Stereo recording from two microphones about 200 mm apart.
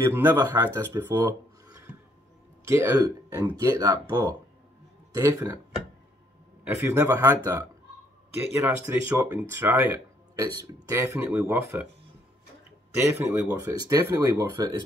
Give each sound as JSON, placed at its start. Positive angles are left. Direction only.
{"t": 0.1, "sound": "speech", "side_deg": -10}
{"t": 2.6, "sound": "speech", "side_deg": -15}
{"t": 6.6, "sound": "speech", "side_deg": -10}
{"t": 13.0, "sound": "speech", "side_deg": -15}